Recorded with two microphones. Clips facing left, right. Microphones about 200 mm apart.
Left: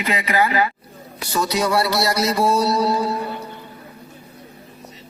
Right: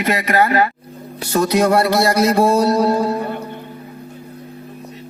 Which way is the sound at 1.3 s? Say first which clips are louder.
Right 6 dB; 55° right (ahead or behind).